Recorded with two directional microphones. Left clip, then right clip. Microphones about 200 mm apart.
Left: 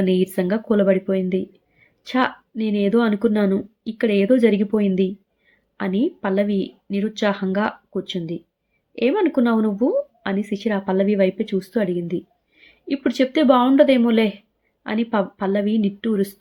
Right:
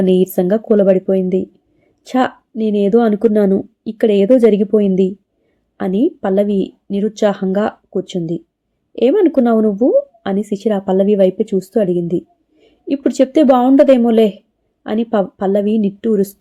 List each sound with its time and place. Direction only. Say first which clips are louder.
0.0 s speech: right 7 dB; 25° right (ahead or behind)